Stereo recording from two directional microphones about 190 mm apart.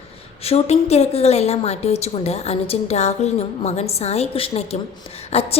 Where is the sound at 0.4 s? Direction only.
35° left (ahead or behind).